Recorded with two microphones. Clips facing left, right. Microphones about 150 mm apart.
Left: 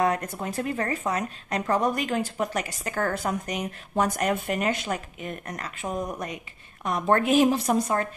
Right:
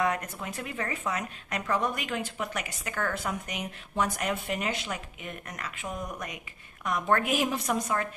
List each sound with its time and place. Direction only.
0.0 s a woman's voice: 35° left (ahead or behind)